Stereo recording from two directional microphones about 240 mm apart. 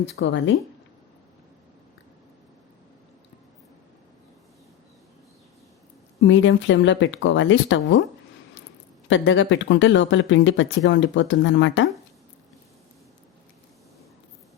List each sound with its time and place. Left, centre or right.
0.0 s speech: left
6.2 s speech: left
9.0 s speech: left